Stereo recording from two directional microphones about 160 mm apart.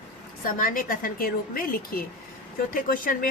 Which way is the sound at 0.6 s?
60° left (ahead or behind).